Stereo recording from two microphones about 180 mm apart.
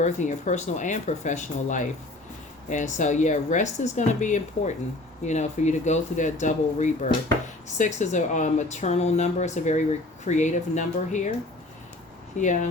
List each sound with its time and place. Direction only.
0.0 s speech: 40° left (ahead or behind)
12.4 s speech: 45° left (ahead or behind)